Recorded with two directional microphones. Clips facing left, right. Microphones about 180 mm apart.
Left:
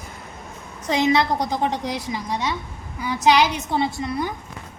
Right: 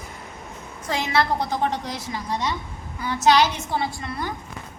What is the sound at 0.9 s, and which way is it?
A woman's voice, 20° left (ahead or behind).